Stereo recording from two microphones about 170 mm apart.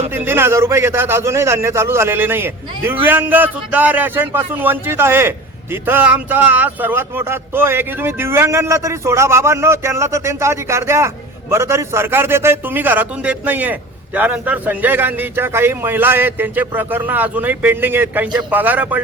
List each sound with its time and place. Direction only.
0.1 s a man's voice: 15° right (ahead or behind)